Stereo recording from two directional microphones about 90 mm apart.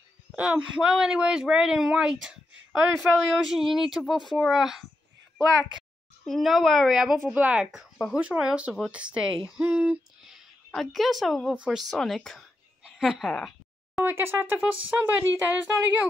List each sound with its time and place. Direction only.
0.4 s speech: 10° right (ahead or behind)
6.2 s speech: centre (ahead or behind)
7.3 s speech: 15° right (ahead or behind)
7.7 s speech: 5° right (ahead or behind)
10.7 s speech: centre (ahead or behind)
11.5 s speech: 10° right (ahead or behind)
11.9 s speech: 5° left (ahead or behind)
12.8 s a sound: 5° right (ahead or behind)
14.0 s a woman's voice: 25° right (ahead or behind)